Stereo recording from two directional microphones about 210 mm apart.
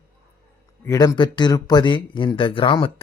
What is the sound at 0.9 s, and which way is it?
Speech, 20° left (ahead or behind).